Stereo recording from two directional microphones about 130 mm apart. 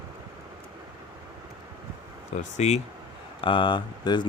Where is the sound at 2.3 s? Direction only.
65° left (ahead or behind).